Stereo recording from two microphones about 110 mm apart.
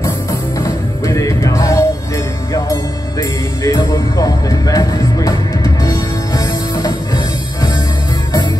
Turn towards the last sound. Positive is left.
turn(degrees=35)  # may be behind; listen again after turning